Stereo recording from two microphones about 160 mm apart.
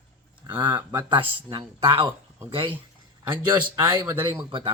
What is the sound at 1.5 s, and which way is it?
Speech, 30° right (ahead or behind).